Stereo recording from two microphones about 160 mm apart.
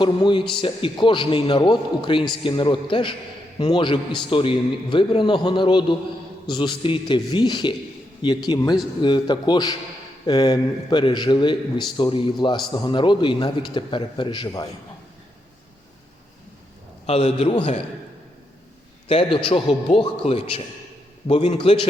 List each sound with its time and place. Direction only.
0.0 s a man's voice: 30° left (ahead or behind)
17.1 s a man's voice: 40° left (ahead or behind)
19.0 s a man's voice: 35° left (ahead or behind)